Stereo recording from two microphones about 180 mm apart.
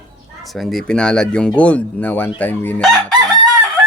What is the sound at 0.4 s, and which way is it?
Speech, centre (ahead or behind).